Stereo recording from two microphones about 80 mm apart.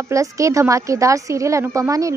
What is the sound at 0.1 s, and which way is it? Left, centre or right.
A woman's voice, right.